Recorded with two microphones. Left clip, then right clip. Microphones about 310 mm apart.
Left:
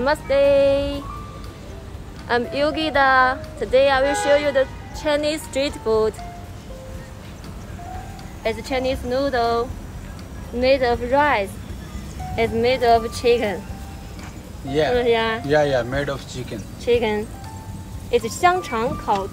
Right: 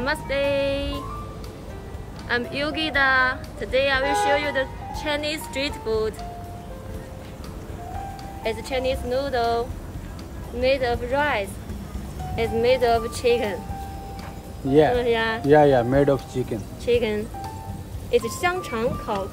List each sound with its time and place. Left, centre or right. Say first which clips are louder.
0.0 s speech: left 7 dB; centre
2.2 s speech: left 5 dB; centre
8.5 s speech: left 2 dB; centre
10.6 s speech: left 4 dB; centre
15.0 s speech: left 3 dB; centre
15.5 s speech: right 4 dB; right
16.8 s speech: left 3 dB; centre
18.4 s speech: left 5 dB; centre